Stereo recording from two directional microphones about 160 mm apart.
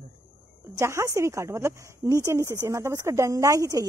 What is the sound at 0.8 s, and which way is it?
Speech, 20° right (ahead or behind).